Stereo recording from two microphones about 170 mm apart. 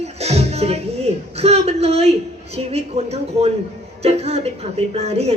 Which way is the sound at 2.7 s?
40° right (ahead or behind).